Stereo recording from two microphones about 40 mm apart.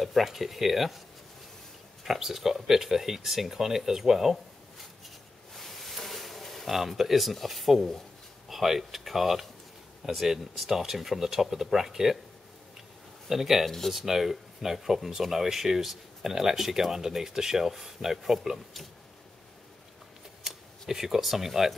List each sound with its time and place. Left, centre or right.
0.0 s speech: centre
2.0 s speech: centre
5.5 s a sound: centre
6.7 s speech: centre
13.3 s speech: centre
13.7 s speech: centre
13.9 s speech: centre
20.4 s speech: centre